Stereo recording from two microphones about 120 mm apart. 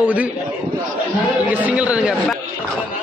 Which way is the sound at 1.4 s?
15° right (ahead or behind).